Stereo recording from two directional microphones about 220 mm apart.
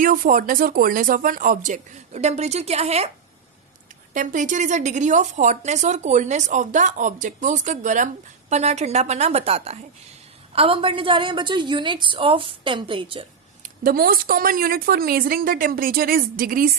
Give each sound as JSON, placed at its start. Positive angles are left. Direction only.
{"t": 0.0, "sound": "a woman's voice", "side_deg": -40}
{"t": 4.1, "sound": "a woman's voice", "side_deg": -35}
{"t": 13.6, "sound": "a woman's voice", "side_deg": -40}